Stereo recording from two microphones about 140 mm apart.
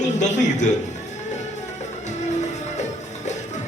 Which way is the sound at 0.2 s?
55° left (ahead or behind).